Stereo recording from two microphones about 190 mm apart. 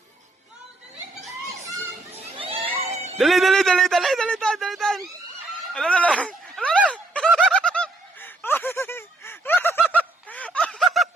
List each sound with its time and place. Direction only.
2.1 s children playing: 30° right (ahead or behind)
2.9 s a sound: 35° right (ahead or behind)
3.2 s speech: centre (ahead or behind)
6.9 s bird: 5° left (ahead or behind)